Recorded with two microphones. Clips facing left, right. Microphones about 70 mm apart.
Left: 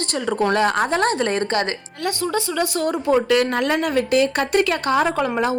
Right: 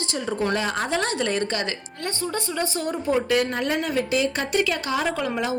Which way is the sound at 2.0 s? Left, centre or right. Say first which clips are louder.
Left 6 dB; left.